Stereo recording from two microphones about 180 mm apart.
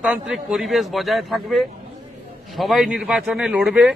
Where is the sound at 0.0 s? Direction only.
5° right (ahead or behind).